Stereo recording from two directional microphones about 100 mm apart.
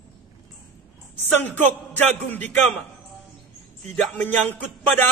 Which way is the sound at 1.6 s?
20° left (ahead or behind).